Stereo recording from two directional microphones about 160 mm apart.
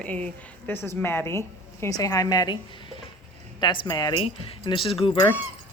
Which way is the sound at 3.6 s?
25° left (ahead or behind).